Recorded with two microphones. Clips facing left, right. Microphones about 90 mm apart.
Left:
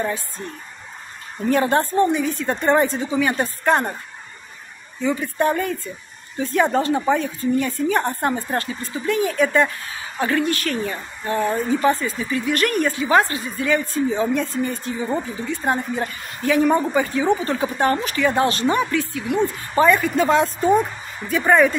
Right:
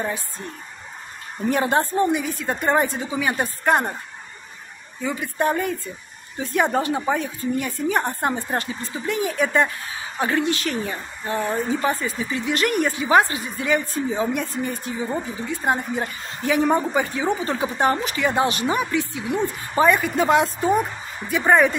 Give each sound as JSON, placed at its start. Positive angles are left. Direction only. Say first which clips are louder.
{"t": 1.5, "sound": "speech", "louder": "left 2 dB", "side_deg": -15}
{"t": 5.0, "sound": "speech", "louder": "left 3 dB", "side_deg": -15}